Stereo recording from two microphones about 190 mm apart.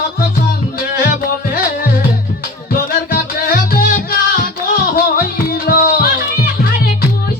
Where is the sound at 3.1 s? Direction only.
45° left (ahead or behind).